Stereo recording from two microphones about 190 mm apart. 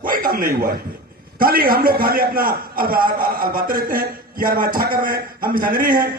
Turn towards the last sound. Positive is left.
turn(degrees=-50)  # may be behind; listen again after turning